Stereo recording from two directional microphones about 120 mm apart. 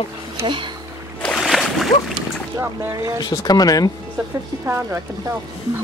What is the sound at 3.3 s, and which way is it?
Speech, 35° left (ahead or behind).